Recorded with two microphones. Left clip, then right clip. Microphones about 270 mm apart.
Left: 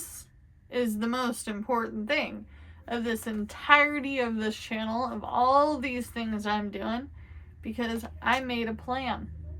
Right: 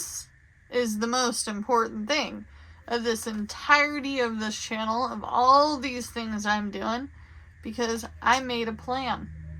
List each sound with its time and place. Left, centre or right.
0.7 s a woman's voice: centre